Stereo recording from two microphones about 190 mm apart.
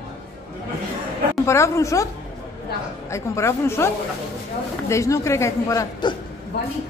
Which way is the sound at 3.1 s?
15° left (ahead or behind).